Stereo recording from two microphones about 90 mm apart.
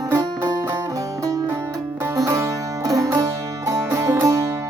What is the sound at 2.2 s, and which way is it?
Music, 35° right (ahead or behind).